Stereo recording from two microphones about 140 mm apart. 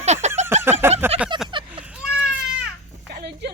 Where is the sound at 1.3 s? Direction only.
35° right (ahead or behind).